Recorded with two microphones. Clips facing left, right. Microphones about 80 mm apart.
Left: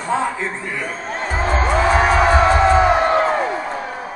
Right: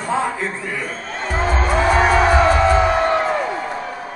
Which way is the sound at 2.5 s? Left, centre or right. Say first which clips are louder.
Left 2 dB; left.